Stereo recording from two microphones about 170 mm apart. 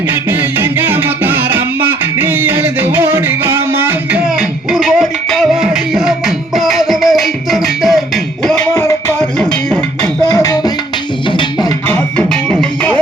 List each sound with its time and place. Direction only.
0.1 s music: 10° right (ahead or behind)
8.7 s music: 15° left (ahead or behind)
9.6 s music: 5° left (ahead or behind)
10.3 s music: 20° left (ahead or behind)
11.9 s music: 10° left (ahead or behind)